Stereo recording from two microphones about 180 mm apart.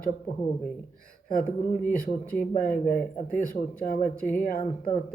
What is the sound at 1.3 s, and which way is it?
Speech, 50° left (ahead or behind).